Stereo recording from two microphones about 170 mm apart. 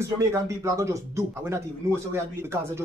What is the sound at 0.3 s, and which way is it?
Speech, 15° right (ahead or behind).